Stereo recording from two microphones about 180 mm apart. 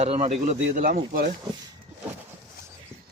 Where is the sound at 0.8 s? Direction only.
50° right (ahead or behind).